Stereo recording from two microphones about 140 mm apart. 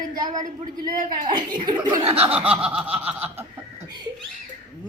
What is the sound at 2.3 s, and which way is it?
Snicker, 10° right (ahead or behind).